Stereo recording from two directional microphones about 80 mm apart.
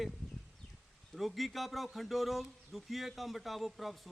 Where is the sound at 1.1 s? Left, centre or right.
Centre.